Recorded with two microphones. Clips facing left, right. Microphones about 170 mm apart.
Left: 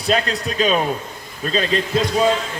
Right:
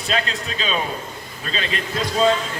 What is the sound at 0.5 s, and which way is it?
Speech, 50° left (ahead or behind).